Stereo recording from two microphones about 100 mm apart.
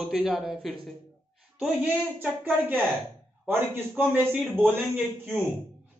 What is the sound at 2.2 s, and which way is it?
A man's voice, 15° right (ahead or behind).